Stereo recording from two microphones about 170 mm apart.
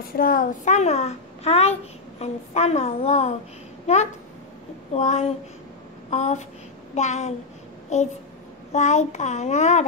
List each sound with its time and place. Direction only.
0.0 s a child's voice: 60° left (ahead or behind); by 5.3 s 40° left (ahead or behind)
6.0 s a sound: 40° left (ahead or behind)
7.0 s a child's voice: 40° left (ahead or behind)